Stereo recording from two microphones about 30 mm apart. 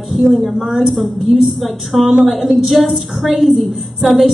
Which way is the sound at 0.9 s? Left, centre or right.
Centre.